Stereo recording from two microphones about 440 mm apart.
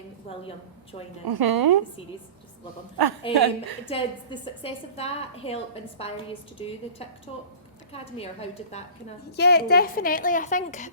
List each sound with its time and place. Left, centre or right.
1.2 s a woman's voice: right
3.3 s a woman's voice: right
3.8 s a woman's voice: centre
7.9 s a woman's voice: centre